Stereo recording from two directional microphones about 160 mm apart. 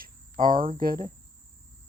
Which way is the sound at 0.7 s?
65° right (ahead or behind).